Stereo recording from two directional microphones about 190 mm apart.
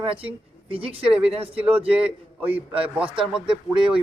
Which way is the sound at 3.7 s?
25° right (ahead or behind).